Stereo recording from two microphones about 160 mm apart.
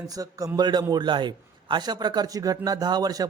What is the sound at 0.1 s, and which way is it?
Speech, 20° right (ahead or behind).